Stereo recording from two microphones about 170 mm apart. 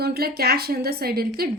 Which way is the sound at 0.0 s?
65° right (ahead or behind).